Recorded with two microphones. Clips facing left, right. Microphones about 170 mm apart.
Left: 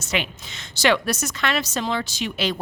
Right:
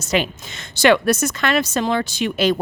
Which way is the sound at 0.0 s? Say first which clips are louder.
Right 6 dB; 40° right (ahead or behind).